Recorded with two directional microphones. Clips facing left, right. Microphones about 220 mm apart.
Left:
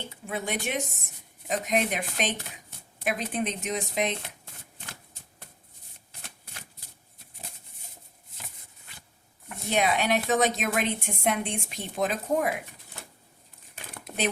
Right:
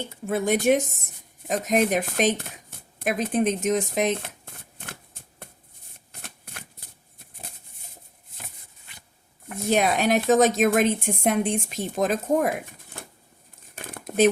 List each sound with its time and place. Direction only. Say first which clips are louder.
0.3 s speech: right 11 dB; 45° right (ahead or behind)
6.1 s shuffling cards: right 5 dB; 55° right (ahead or behind)
9.5 s speech: right 4 dB; 45° right (ahead or behind)
13.7 s crumpling: right 11 dB; 50° right (ahead or behind)